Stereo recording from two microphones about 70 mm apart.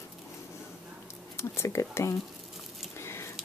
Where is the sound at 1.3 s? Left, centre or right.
Left.